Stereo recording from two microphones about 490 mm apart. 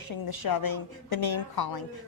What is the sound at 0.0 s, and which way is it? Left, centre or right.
A woman's voice, left.